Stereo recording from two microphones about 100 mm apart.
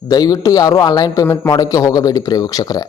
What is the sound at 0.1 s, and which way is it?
Speech, 40° left (ahead or behind).